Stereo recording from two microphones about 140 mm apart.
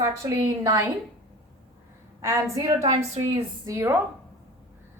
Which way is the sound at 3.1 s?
50° right (ahead or behind).